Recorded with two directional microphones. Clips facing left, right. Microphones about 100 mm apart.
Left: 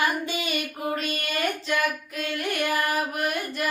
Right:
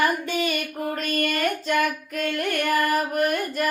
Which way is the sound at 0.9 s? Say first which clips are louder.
Right 6 dB; 45° right (ahead or behind).